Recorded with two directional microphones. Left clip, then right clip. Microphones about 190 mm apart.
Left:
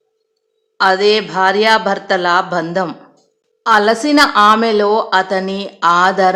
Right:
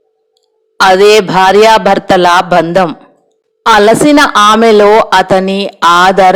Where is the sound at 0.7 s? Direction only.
35° right (ahead or behind).